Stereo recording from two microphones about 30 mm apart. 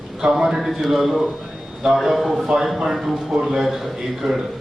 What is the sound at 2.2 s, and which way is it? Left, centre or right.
A man's voice, centre.